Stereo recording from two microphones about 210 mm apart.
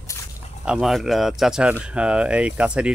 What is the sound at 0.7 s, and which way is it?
Speech, centre (ahead or behind).